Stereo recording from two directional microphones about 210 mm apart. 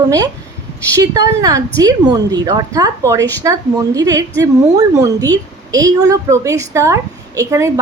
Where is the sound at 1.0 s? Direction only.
20° right (ahead or behind).